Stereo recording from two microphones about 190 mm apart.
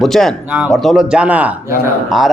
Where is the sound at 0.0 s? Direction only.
Centre (ahead or behind).